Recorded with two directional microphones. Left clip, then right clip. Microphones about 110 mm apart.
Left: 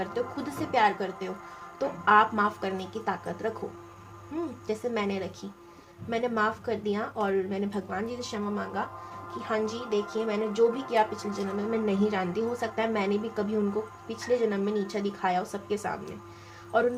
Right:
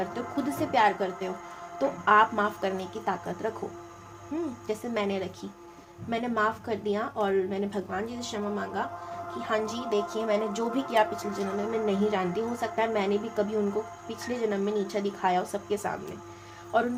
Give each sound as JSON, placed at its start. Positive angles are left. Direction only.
{"t": 0.0, "sound": "speech", "side_deg": -40}
{"t": 4.6, "sound": "speech", "side_deg": -40}
{"t": 9.4, "sound": "speech", "side_deg": -55}